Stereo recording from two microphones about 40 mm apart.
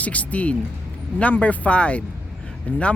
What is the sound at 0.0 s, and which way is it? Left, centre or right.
Speech, left.